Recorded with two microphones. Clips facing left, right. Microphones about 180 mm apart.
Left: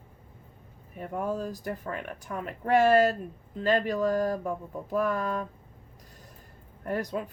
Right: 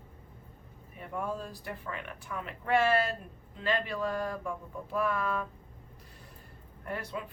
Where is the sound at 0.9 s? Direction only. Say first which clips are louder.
Left 5 dB; 40° left (ahead or behind).